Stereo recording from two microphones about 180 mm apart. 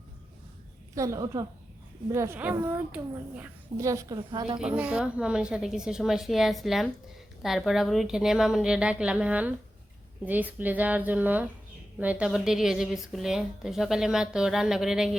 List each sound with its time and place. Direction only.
0.9 s a child's voice: 15° right (ahead or behind)
4.2 s a woman's voice: 25° right (ahead or behind)
4.8 s a child's voice: 5° right (ahead or behind)